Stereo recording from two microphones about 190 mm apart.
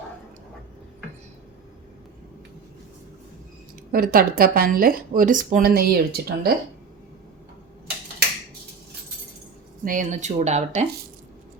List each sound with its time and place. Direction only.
3.9 s speech: 50° right (ahead or behind)
9.8 s speech: 45° right (ahead or behind)